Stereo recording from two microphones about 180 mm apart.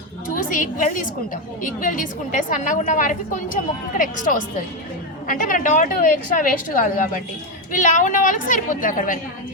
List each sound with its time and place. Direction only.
0.3 s a woman's voice: 45° left (ahead or behind)